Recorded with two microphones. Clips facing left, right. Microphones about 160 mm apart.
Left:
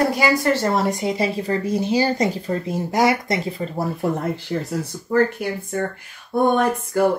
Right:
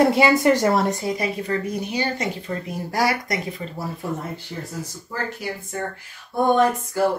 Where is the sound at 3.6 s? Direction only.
50° left (ahead or behind).